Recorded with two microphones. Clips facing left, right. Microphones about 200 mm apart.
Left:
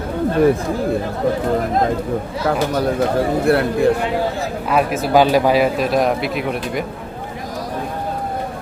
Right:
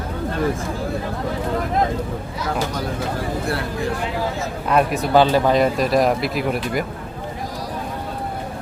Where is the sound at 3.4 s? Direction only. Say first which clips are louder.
Left 9 dB; 60° left (ahead or behind).